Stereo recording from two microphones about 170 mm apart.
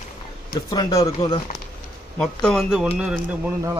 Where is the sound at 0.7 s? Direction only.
20° left (ahead or behind).